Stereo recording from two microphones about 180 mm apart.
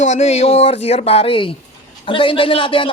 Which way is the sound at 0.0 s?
40° left (ahead or behind).